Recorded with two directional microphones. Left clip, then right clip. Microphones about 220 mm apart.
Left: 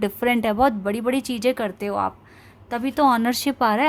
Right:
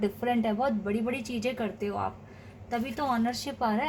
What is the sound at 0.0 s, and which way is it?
A woman's voice, 45° left (ahead or behind).